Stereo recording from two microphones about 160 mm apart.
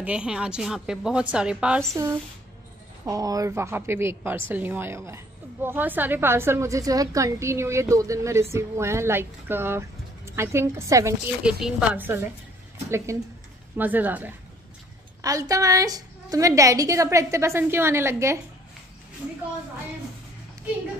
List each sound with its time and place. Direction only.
0.0 s a woman's voice: 5° right (ahead or behind)
3.1 s a woman's voice: 20° right (ahead or behind)
11.4 s a woman's voice: 5° right (ahead or behind)
15.2 s a woman's voice: 20° right (ahead or behind)